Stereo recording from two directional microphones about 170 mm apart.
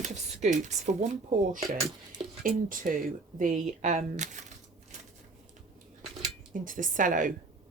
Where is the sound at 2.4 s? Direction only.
55° right (ahead or behind).